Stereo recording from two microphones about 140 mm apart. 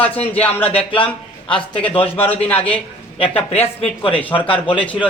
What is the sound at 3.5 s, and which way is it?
Speech, 45° left (ahead or behind).